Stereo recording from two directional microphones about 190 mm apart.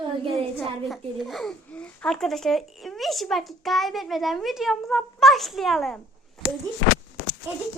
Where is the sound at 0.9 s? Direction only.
Centre (ahead or behind).